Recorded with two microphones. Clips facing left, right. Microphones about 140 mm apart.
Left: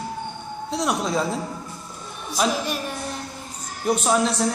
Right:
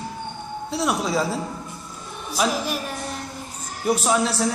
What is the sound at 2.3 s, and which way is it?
Speech, 5° right (ahead or behind).